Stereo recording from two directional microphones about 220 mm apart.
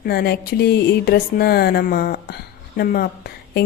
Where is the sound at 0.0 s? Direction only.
45° left (ahead or behind).